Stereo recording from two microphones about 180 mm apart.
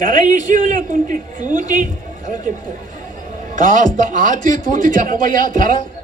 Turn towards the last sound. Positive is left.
turn(degrees=-50)  # may be behind; listen again after turning